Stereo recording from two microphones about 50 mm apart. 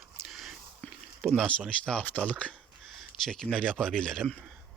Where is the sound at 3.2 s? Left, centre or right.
Centre.